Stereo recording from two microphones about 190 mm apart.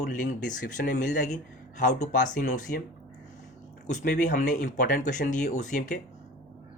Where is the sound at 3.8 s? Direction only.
40° left (ahead or behind).